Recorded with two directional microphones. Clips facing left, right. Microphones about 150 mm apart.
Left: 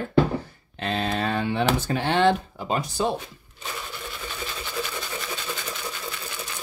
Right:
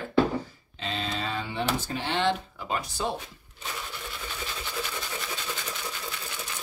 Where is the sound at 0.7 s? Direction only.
60° left (ahead or behind).